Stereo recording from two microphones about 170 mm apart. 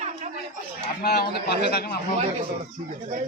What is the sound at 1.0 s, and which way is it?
Speech, 70° left (ahead or behind).